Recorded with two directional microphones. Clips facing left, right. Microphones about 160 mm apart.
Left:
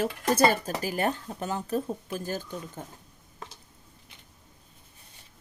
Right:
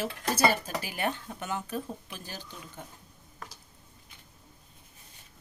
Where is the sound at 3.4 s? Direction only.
25° left (ahead or behind).